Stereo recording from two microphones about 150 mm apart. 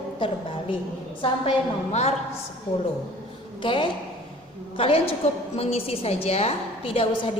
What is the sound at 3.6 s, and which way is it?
A woman's voice, 35° left (ahead or behind).